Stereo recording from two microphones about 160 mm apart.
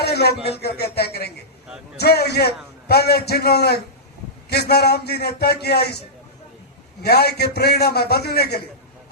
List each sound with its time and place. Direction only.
0.0 s a sound: 90° left
0.9 s a man's voice: 85° left
7.0 s a man's voice: 85° left